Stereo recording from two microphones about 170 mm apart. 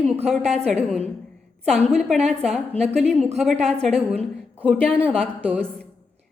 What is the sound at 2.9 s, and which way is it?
A woman's voice, centre (ahead or behind).